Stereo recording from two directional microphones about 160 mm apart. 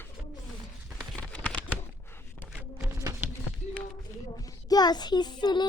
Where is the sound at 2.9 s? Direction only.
20° right (ahead or behind).